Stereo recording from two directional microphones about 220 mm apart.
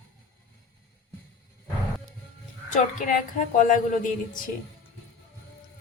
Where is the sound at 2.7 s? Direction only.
35° left (ahead or behind).